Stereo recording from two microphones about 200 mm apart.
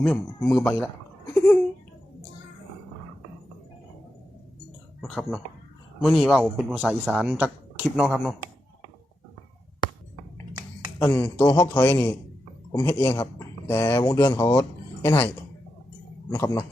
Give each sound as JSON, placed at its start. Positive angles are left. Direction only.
{"t": 0.0, "sound": "speech", "side_deg": 5}
{"t": 1.3, "sound": "a sound", "side_deg": 10}
{"t": 4.9, "sound": "speech", "side_deg": 0}
{"t": 11.0, "sound": "a man's voice", "side_deg": 10}
{"t": 16.3, "sound": "a man's voice", "side_deg": 15}